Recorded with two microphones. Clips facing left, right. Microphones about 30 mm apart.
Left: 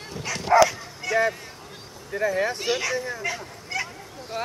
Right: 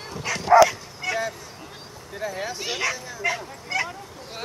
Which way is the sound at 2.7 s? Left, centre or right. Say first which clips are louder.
Left 3 dB; centre.